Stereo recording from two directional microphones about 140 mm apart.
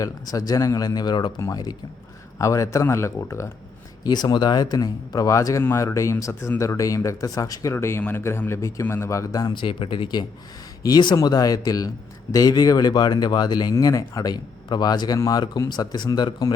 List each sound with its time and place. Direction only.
0.0 s speech: 25° left (ahead or behind)